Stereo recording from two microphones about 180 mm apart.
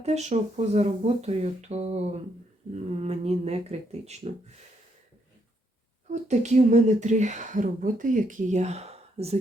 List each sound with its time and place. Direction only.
0.0 s speech: 40° right (ahead or behind)
6.1 s speech: 40° right (ahead or behind)